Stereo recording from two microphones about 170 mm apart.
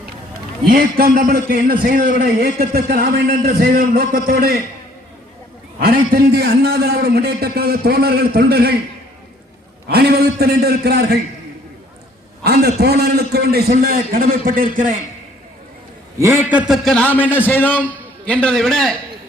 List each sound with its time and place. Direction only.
0.7 s a man's voice: 60° right (ahead or behind)
5.8 s a man's voice: 60° right (ahead or behind)
9.9 s a man's voice: 75° right (ahead or behind)
12.4 s a sound: 70° right (ahead or behind)
12.8 s a man's voice: 70° right (ahead or behind); by 14.9 s 50° right (ahead or behind)
16.1 s a man's voice: 15° right (ahead or behind); by 18.9 s 5° left (ahead or behind)